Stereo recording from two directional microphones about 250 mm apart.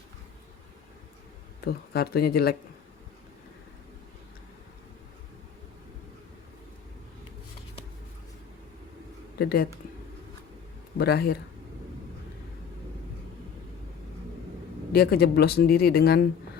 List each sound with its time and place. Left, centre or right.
1.6 s speech: left
9.4 s speech: left
10.9 s speech: left
14.9 s speech: left